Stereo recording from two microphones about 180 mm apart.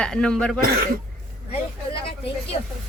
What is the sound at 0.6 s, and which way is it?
Speech, 55° right (ahead or behind).